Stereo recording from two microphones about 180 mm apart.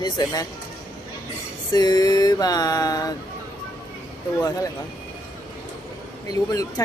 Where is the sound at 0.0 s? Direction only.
25° left (ahead or behind).